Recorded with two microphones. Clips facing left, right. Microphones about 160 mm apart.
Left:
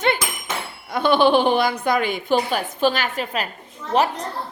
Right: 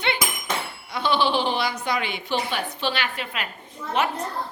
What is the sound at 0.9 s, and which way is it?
A woman's voice, 50° left (ahead or behind).